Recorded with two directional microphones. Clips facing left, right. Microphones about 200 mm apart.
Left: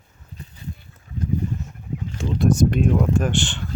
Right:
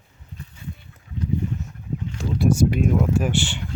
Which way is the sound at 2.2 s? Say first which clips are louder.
Left 1 dB; 5° right (ahead or behind).